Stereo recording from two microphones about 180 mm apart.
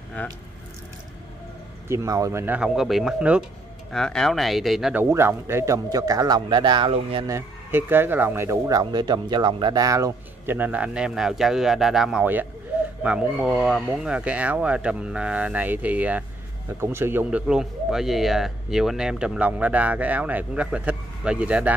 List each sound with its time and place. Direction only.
0.2 s speech: 10° left (ahead or behind)
1.9 s speech: 15° right (ahead or behind); by 5.0 s centre (ahead or behind)
5.1 s a man's voice: 15° right (ahead or behind)
7.2 s speech: 15° right (ahead or behind)